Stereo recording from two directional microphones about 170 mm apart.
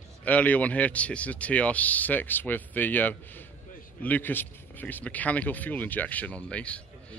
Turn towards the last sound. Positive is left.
turn(degrees=5)  # may be behind; listen again after turning